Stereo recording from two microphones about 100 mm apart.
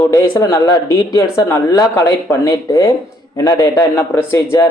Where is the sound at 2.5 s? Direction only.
35° left (ahead or behind).